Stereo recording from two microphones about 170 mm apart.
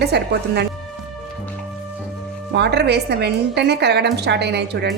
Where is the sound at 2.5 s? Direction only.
85° right.